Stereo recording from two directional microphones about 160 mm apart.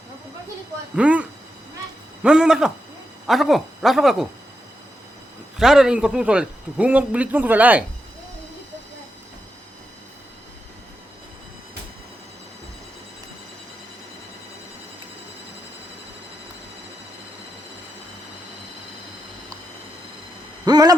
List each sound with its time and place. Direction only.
0.9 s speech: 10° right (ahead or behind)
5.5 s a man's voice: 5° right (ahead or behind)
20.7 s owl: 25° right (ahead or behind)